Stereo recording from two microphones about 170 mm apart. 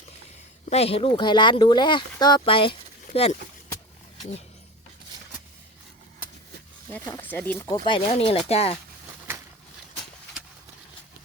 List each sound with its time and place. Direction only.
0.7 s speech: 35° left (ahead or behind)
6.9 s speech: 10° left (ahead or behind)
7.7 s speech: 30° left (ahead or behind)